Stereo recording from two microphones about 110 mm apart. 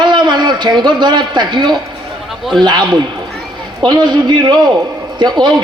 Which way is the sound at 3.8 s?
40° right (ahead or behind).